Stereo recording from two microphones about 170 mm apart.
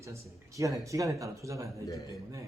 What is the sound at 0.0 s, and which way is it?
Speech, 20° right (ahead or behind).